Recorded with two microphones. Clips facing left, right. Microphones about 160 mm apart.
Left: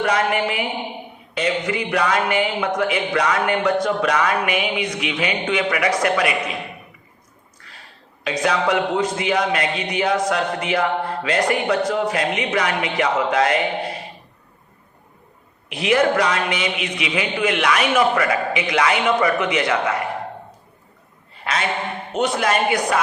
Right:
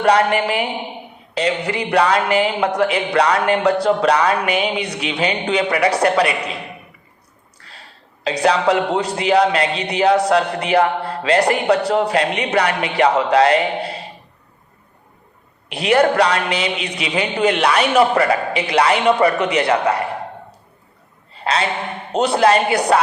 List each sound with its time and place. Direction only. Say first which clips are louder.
0.3 s a woman's voice: right 3 dB; 65° right (ahead or behind)
1.4 s speech: right 2 dB; 35° right (ahead or behind)
8.2 s speech: right 4 dB; 35° right (ahead or behind)
10.7 s mantra: right 6 dB; 65° right (ahead or behind)
11.2 s speech: right 6 dB; 35° right (ahead or behind)
12.5 s speech: right 4 dB; 65° right (ahead or behind)
12.8 s speech: right 4 dB; 35° right (ahead or behind)
15.7 s speech: right 3 dB; 35° right (ahead or behind)
16.1 s speech: right 4 dB; 65° right (ahead or behind)
16.5 s speech: right 2 dB; 30° right (ahead or behind)
21.4 s a woman's voice: right 3 dB; 35° right (ahead or behind)